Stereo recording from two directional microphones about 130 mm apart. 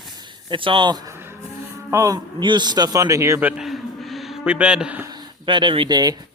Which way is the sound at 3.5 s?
Centre (ahead or behind).